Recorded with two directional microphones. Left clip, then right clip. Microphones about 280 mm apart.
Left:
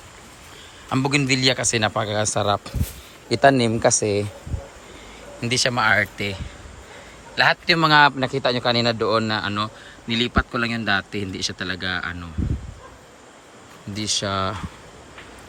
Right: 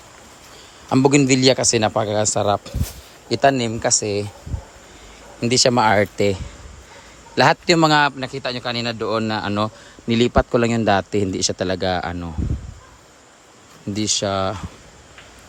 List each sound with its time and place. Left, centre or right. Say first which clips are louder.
0.9 s a man's voice: right 5 dB; right
5.4 s a man's voice: right 4 dB; right
13.9 s a man's voice: right 3 dB; right